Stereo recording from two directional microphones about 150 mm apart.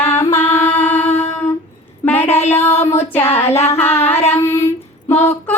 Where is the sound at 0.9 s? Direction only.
45° left (ahead or behind).